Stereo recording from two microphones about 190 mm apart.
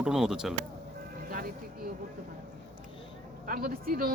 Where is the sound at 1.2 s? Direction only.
50° right (ahead or behind).